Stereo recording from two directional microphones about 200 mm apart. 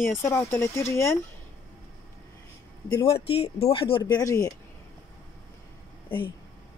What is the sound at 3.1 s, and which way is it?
Speech, 30° left (ahead or behind).